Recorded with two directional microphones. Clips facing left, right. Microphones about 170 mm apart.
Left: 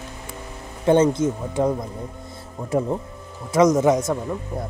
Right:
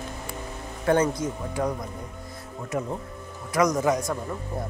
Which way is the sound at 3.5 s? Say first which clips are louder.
Left 6 dB; 25° left (ahead or behind).